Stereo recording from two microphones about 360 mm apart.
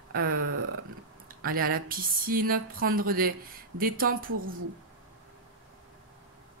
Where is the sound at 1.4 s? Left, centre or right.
Right.